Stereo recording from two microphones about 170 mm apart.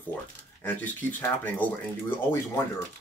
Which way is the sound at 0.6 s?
10° left (ahead or behind).